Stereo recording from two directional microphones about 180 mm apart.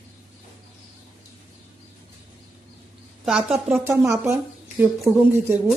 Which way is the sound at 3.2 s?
5° right (ahead or behind).